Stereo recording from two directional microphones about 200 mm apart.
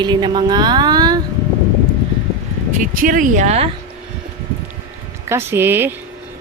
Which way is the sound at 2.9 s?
45° right (ahead or behind).